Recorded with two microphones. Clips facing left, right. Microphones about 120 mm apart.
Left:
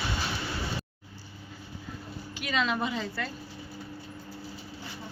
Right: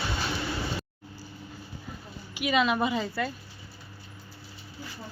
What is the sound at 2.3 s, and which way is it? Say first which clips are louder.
A woman's voice: right 5 dB; 10° right (ahead or behind).